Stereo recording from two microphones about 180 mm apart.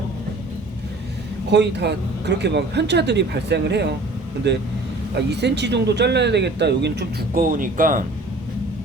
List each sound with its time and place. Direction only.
1.5 s speech: 70° right (ahead or behind); by 8.0 s 50° right (ahead or behind)